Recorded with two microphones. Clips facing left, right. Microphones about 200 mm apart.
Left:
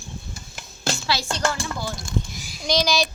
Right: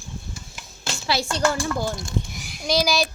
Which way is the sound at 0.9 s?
40° left (ahead or behind).